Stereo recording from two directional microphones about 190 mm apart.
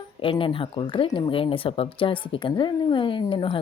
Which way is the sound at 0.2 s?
25° left (ahead or behind).